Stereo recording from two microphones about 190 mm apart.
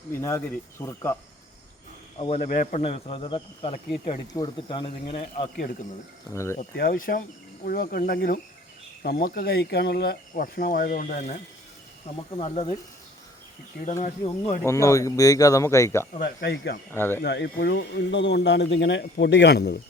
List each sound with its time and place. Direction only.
0.2 s speech: 15° left (ahead or behind)
2.1 s speech: 30° left (ahead or behind)
2.4 s speech: 45° left (ahead or behind)
2.8 s speech: 30° left (ahead or behind)
6.3 s speech: 15° left (ahead or behind)
6.7 s speech: 50° left (ahead or behind); by 12.7 s 30° left (ahead or behind)
14.0 s speech: 40° left (ahead or behind)
14.6 s speech: 15° left (ahead or behind)
16.1 s a man's voice: 55° left (ahead or behind)
16.9 s speech: 10° left (ahead or behind)
17.2 s a man's voice: 65° left (ahead or behind)